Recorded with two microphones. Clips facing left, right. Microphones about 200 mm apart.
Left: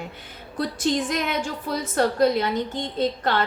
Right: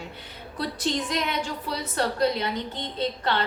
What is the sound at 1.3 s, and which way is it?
A woman's voice, 45° left (ahead or behind).